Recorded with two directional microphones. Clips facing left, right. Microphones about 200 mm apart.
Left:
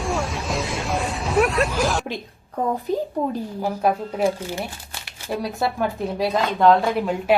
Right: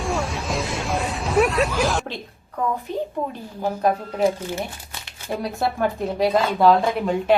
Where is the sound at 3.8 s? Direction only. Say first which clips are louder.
Right 1 dB; 10° left (ahead or behind).